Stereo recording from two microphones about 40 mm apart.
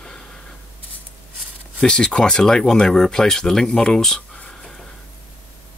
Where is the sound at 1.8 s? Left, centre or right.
Left.